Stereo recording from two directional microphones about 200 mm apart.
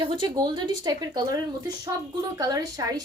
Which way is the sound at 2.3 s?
15° right (ahead or behind).